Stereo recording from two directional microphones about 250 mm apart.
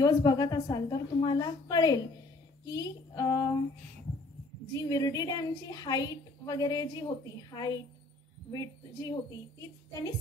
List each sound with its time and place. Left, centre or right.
0.0 s a woman's voice: centre
4.8 s a woman's voice: centre